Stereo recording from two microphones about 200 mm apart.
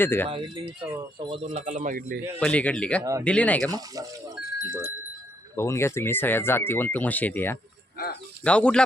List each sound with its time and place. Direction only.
0.0 s speech: 10° left (ahead or behind)
0.3 s speech: 25° right (ahead or behind)
0.9 s wind chime: 10° right (ahead or behind)
1.3 s speech: 35° right (ahead or behind)
2.4 s speech: 5° left (ahead or behind)
3.0 s wind chime: 15° right (ahead or behind)
3.2 s speech: 5° left (ahead or behind)
3.7 s wind chime: 20° right (ahead or behind)
4.5 s speech: 15° right (ahead or behind)
5.5 s speech: 15° left (ahead or behind)